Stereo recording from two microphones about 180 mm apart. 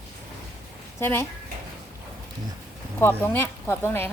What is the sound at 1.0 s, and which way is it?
Speech, 15° left (ahead or behind).